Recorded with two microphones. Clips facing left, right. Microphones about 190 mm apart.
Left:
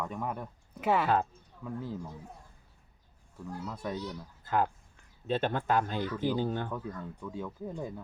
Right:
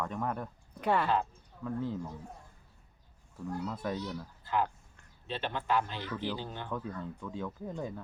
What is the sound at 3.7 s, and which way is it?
Speech, centre (ahead or behind).